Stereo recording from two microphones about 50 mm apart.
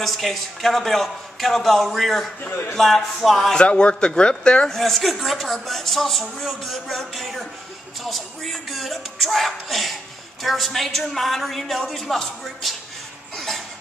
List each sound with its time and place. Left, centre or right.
0.0 s a man's voice: centre
3.5 s speech: centre
4.6 s a man's voice: centre